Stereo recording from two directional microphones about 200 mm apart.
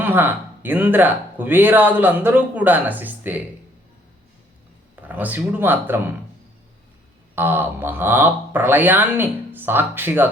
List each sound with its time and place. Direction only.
0.0 s speech: 10° right (ahead or behind)
5.0 s speech: 10° right (ahead or behind)
7.3 s speech: 10° right (ahead or behind)